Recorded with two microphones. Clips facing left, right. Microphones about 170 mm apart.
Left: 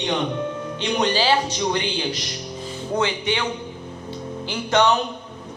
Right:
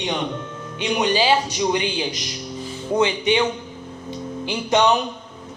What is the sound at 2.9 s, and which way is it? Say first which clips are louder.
Speech: right 5 dB; 20° right (ahead or behind).